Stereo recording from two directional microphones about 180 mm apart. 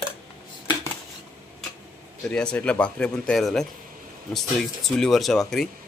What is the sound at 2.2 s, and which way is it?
Speech, 5° left (ahead or behind).